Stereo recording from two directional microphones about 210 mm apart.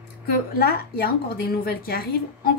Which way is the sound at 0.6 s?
45° left (ahead or behind).